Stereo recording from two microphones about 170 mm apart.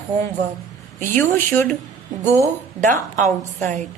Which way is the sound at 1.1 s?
15° left (ahead or behind).